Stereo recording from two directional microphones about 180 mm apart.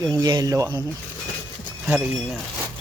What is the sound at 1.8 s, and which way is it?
Speech, 5° right (ahead or behind).